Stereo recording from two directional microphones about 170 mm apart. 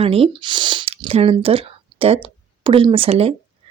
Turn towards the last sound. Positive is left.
turn(degrees=-35)  # may be behind; listen again after turning